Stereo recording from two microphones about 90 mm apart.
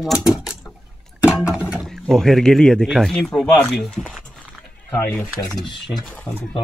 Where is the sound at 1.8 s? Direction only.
5° left (ahead or behind).